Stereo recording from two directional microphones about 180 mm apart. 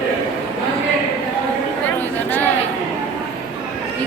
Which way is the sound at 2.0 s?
10° left (ahead or behind).